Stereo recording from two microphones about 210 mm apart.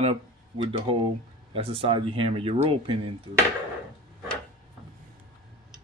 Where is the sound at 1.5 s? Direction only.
25° right (ahead or behind).